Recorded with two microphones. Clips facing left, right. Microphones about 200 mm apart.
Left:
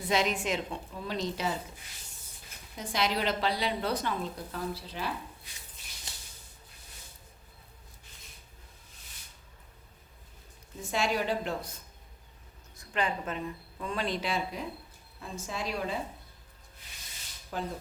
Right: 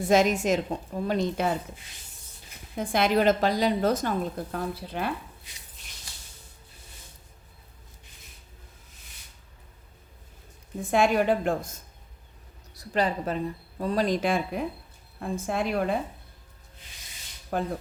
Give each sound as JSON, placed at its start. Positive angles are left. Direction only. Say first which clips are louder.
{"t": 0.0, "sound": "a woman's voice", "louder": "right 7 dB", "side_deg": -45}
{"t": 2.7, "sound": "a woman's voice", "louder": "right 8 dB", "side_deg": -55}
{"t": 10.8, "sound": "a woman's voice", "louder": "right 8 dB", "side_deg": -55}
{"t": 12.7, "sound": "a woman's voice", "louder": "right 6 dB", "side_deg": -35}
{"t": 17.5, "sound": "a woman's voice", "louder": "right 7 dB", "side_deg": -55}